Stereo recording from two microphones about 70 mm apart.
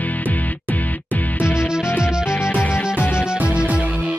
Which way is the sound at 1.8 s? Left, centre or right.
Left.